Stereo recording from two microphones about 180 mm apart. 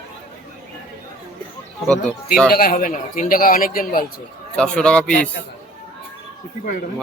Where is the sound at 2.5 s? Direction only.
55° left (ahead or behind).